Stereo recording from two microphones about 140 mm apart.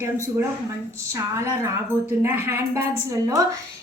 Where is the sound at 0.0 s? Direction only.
20° right (ahead or behind).